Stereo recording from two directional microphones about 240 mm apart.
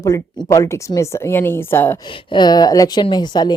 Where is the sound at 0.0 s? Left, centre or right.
Centre.